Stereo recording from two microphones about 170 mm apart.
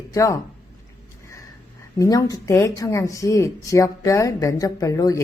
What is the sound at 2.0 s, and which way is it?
Speech, 20° left (ahead or behind).